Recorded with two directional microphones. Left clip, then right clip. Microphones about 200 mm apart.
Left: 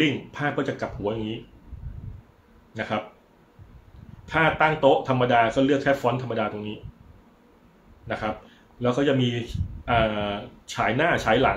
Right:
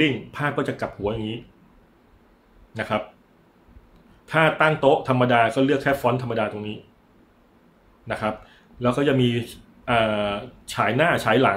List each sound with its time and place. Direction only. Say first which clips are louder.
0.0 s speech: right 2 dB; 35° right (ahead or behind)
2.7 s speech: right 3 dB; 35° right (ahead or behind)
4.3 s speech: right 2 dB; 35° right (ahead or behind)
8.1 s speech: right 2 dB; 35° right (ahead or behind)